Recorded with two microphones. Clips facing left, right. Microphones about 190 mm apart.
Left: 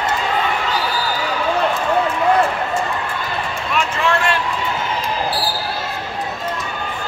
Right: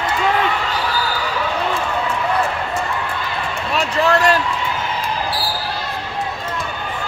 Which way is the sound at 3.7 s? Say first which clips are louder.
Right 3 dB; 40° right (ahead or behind).